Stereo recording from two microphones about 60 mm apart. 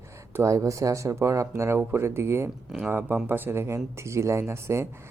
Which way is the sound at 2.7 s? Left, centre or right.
Centre.